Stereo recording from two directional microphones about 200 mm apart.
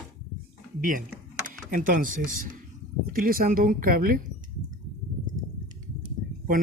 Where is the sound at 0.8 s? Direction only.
40° right (ahead or behind).